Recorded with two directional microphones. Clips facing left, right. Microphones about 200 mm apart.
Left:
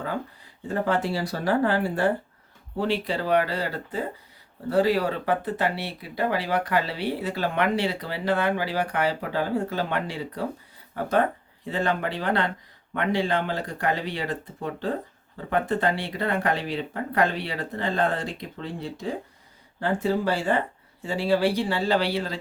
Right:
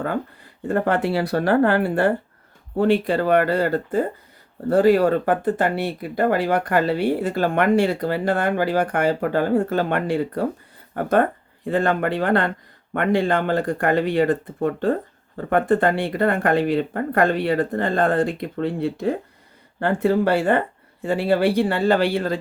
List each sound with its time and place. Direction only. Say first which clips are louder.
0.7 s speech: right 5 dB; 60° right (ahead or behind)